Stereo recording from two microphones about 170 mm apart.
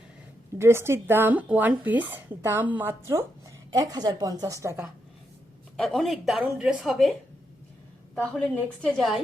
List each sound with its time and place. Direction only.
0.6 s a woman's voice: 15° right (ahead or behind)
5.7 s speech: centre (ahead or behind)
8.1 s speech: 10° left (ahead or behind)